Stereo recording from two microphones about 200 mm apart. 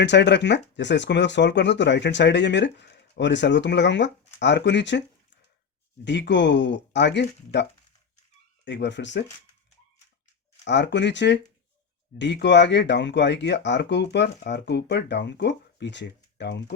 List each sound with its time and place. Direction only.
0.0 s speech: 60° left (ahead or behind)
6.1 s speech: 60° left (ahead or behind)
10.6 s speech: 60° left (ahead or behind)